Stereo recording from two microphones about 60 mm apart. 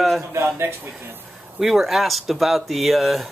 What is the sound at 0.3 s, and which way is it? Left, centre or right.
Speech, right.